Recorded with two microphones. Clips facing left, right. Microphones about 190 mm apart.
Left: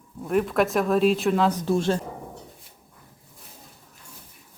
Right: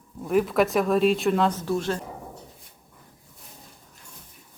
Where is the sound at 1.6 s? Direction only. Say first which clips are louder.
Left 3 dB; 25° left (ahead or behind).